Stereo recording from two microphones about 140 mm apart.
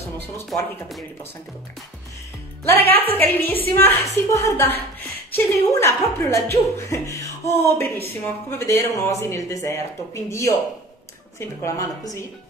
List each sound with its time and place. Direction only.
0.5 s speech: centre (ahead or behind)
2.6 s speech: 15° left (ahead or behind)